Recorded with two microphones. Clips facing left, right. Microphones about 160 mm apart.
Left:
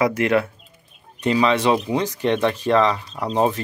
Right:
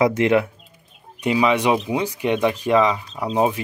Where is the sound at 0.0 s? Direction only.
20° right (ahead or behind).